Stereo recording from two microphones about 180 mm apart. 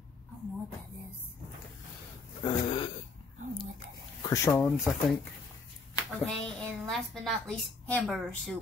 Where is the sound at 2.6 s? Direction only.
30° left (ahead or behind).